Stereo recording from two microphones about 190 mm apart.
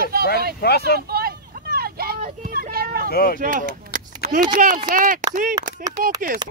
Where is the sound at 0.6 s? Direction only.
60° left (ahead or behind).